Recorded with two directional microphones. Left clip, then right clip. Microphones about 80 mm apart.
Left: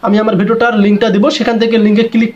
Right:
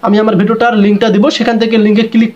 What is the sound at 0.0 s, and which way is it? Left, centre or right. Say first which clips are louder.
Speech: right 2 dB; right.